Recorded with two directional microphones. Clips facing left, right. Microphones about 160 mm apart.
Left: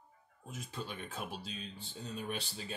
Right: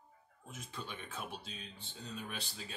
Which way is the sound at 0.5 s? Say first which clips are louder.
Left 3 dB; 35° left (ahead or behind).